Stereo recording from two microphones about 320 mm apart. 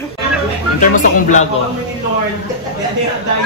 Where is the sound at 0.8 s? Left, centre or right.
Left.